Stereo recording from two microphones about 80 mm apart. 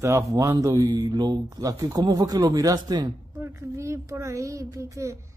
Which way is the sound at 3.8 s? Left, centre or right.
Right.